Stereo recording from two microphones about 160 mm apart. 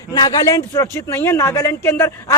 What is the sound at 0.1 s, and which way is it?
Speech, 25° left (ahead or behind).